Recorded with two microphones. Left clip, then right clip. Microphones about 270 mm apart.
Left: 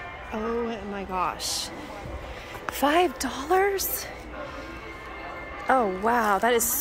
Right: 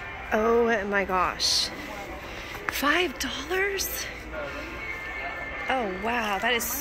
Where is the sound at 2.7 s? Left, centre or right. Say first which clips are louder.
Left 2 dB; centre.